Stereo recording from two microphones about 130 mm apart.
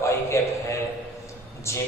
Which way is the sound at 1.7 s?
20° left (ahead or behind).